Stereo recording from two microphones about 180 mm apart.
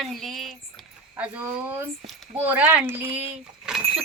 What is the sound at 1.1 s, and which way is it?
A woman's voice, 10° right (ahead or behind).